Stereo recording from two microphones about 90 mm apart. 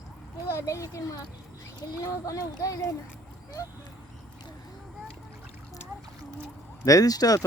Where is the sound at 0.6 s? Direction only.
35° left (ahead or behind).